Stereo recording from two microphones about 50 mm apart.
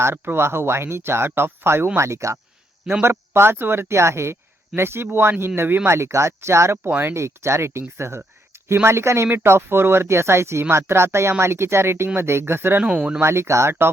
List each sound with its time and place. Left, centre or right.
0.3 s speech: right
2.0 s speech: right
3.0 s speech: right
5.9 s speech: right
9.3 s speech: right
12.8 s speech: centre
13.2 s speech: right